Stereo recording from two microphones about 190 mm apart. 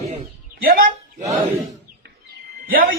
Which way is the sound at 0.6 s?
50° right (ahead or behind).